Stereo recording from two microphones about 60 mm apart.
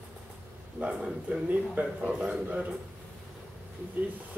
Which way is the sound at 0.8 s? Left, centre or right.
Right.